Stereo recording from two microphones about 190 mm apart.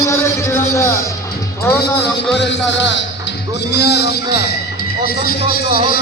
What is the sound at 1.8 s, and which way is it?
A man's voice, 60° left (ahead or behind).